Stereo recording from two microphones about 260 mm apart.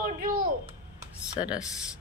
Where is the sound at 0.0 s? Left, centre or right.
Right.